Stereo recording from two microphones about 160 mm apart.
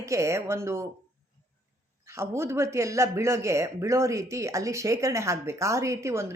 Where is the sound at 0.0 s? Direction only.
20° right (ahead or behind).